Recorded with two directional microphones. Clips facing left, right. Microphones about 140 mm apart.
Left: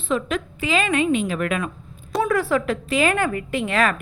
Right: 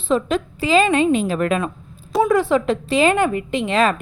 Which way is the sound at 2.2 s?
20° right (ahead or behind).